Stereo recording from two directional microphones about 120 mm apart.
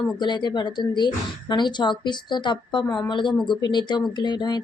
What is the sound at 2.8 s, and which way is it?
Speech, 5° left (ahead or behind).